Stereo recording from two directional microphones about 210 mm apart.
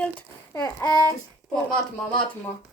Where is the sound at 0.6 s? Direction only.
15° left (ahead or behind).